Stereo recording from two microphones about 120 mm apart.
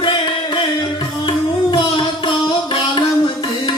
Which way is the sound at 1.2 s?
40° left (ahead or behind).